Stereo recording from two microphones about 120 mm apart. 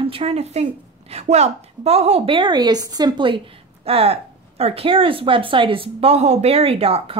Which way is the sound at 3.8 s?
55° right (ahead or behind).